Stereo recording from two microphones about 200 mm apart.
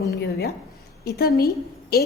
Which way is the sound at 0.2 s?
55° left (ahead or behind).